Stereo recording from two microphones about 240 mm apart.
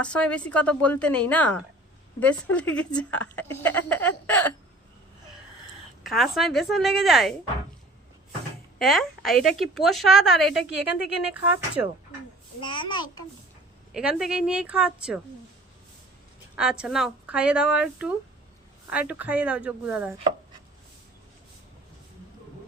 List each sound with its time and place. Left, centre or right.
0.0 s a woman's voice: centre
3.8 s a sound: centre
6.0 s a woman's voice: centre
8.8 s a woman's voice: centre
12.6 s a child's voice: centre
13.9 s a woman's voice: centre
16.6 s a woman's voice: centre